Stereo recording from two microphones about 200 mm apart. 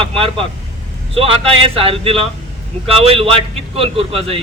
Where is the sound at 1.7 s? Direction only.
30° right (ahead or behind).